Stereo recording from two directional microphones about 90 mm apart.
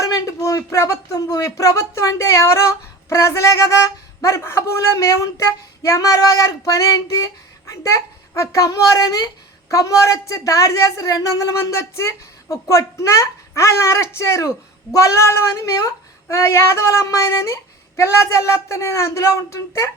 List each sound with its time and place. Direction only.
0.0 s a child's voice: 35° left (ahead or behind)